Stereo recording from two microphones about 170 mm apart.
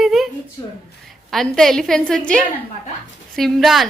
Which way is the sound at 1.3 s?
Centre (ahead or behind).